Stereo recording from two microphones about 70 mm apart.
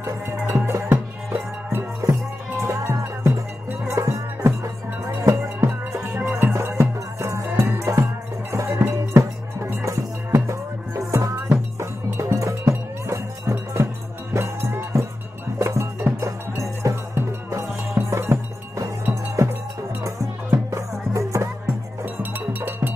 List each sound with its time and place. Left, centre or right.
0.0 s music: right
2.0 s music: right
20.7 s music: right
22.0 s music: right